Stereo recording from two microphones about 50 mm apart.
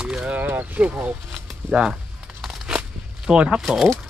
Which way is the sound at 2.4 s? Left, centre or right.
Centre.